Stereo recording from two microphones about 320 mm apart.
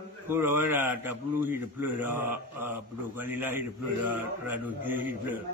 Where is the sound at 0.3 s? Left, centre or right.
Centre.